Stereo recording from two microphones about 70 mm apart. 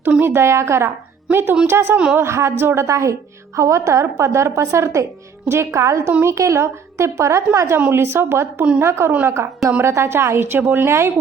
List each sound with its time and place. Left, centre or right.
0.2 s a woman's voice: right